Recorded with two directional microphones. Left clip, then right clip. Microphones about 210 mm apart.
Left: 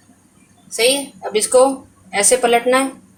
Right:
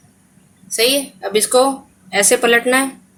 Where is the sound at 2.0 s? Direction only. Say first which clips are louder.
Right 1 dB; 35° right (ahead or behind).